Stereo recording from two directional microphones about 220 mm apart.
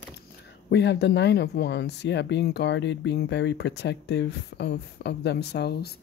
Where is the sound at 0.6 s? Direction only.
50° left (ahead or behind).